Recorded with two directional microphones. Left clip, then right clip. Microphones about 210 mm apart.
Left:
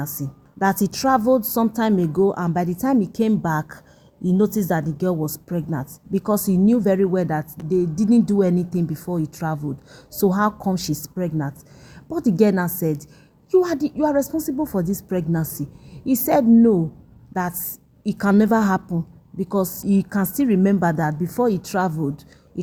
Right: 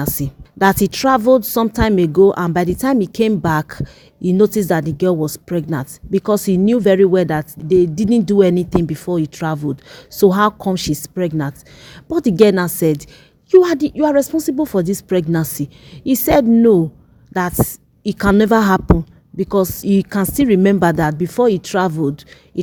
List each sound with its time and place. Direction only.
0.2 s speech: 50° right (ahead or behind)
0.8 s a woman's voice: 40° right (ahead or behind)
2.2 s speech: 65° right (ahead or behind)
2.5 s a woman's voice: 40° right (ahead or behind)